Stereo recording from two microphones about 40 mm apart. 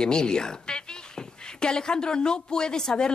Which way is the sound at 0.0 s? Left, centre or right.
Centre.